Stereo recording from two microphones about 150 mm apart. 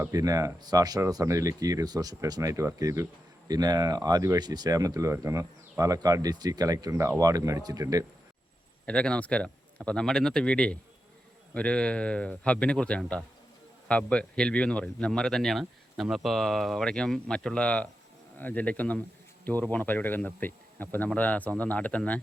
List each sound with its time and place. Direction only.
0.1 s speech: 25° right (ahead or behind)
8.9 s a man's voice: 5° left (ahead or behind)